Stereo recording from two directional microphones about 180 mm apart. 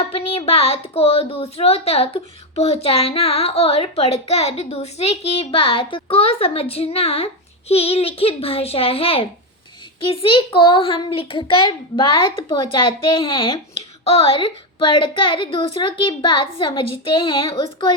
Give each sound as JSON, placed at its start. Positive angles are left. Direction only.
{"t": 0.0, "sound": "a woman's voice", "side_deg": 30}